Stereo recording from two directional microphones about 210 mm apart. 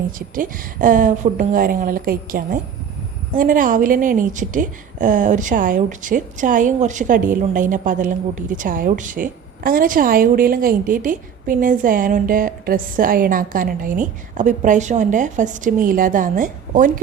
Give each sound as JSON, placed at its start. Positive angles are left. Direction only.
{"t": 0.3, "sound": "a woman's voice", "side_deg": -40}